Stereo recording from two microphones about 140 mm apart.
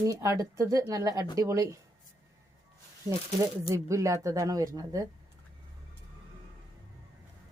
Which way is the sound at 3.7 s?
20° right (ahead or behind).